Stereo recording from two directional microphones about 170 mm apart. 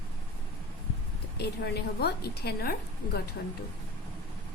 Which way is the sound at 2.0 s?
65° left (ahead or behind).